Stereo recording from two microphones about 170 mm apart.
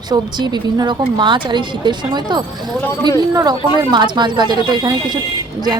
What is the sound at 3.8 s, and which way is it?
A woman's voice, 25° right (ahead or behind).